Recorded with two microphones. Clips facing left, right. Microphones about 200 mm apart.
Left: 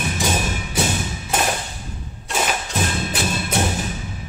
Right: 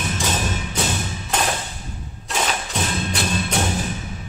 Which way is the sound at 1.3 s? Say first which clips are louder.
Left 1 dB; 10° left (ahead or behind).